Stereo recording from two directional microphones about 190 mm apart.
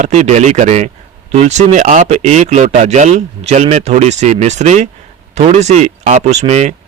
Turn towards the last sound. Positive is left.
turn(degrees=-35)  # may be behind; listen again after turning